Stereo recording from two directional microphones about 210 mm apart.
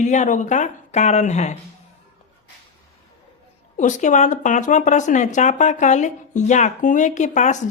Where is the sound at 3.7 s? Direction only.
35° left (ahead or behind).